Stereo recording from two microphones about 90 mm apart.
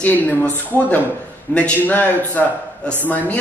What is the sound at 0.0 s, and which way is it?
Speech, 20° left (ahead or behind).